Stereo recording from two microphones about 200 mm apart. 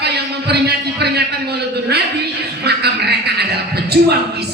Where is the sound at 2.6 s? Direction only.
55° right (ahead or behind).